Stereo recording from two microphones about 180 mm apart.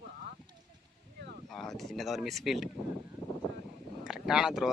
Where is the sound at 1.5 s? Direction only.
Centre (ahead or behind).